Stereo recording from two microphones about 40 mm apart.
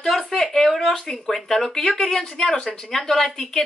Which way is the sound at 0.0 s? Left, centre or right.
Centre.